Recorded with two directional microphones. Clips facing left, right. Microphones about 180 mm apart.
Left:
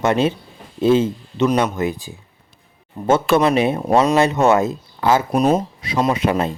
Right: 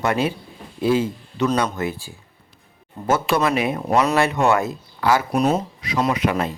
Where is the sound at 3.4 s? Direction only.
25° left (ahead or behind).